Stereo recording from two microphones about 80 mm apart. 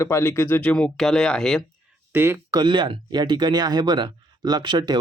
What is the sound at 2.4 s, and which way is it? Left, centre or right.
Speech, right.